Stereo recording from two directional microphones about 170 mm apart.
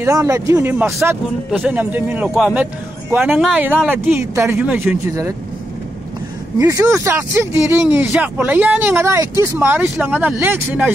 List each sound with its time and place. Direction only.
0.0 s speech: 15° right (ahead or behind)
6.6 s speech: 20° right (ahead or behind)